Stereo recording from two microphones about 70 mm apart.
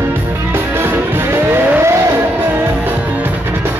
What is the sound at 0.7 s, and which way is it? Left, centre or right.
Music, right.